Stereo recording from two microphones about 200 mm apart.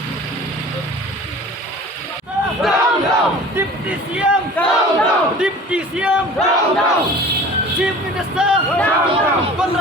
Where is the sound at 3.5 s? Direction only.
10° right (ahead or behind).